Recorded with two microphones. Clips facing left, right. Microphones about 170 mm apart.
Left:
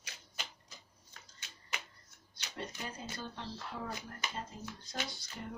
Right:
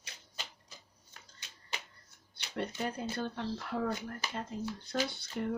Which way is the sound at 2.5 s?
60° right (ahead or behind).